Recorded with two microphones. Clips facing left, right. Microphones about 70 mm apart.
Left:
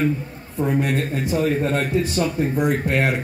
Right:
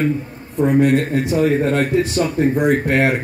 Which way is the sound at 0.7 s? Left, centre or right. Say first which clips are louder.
Right 7 dB; right.